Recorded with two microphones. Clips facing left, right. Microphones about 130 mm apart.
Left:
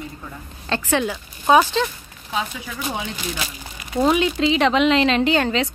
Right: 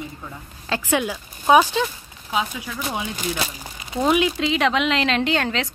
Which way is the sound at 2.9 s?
5° right (ahead or behind).